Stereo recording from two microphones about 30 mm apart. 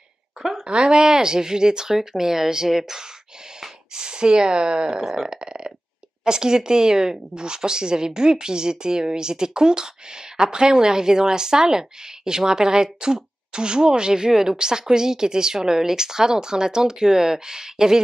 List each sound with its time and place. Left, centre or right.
0.4 s a sound: centre
0.7 s a woman's voice: right
2.0 s speech: centre
3.9 s a woman's voice: right
5.0 s speech: centre
5.4 s a woman's voice: right